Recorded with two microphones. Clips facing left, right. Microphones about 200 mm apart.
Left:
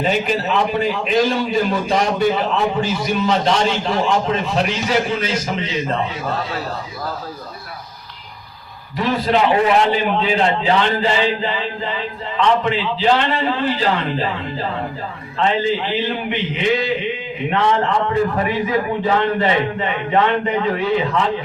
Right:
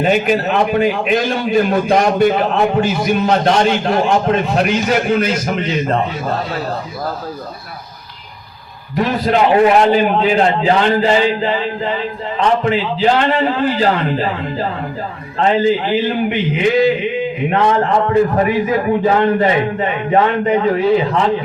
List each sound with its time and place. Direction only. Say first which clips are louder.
0.0 s a man's voice: right 5 dB; 55° right (ahead or behind)
9.0 s a man's voice: right 3 dB; 45° right (ahead or behind)